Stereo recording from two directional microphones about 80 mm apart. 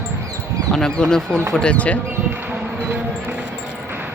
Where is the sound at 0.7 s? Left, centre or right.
Centre.